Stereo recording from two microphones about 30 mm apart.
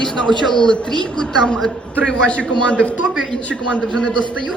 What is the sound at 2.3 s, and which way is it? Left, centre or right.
A man's voice, left.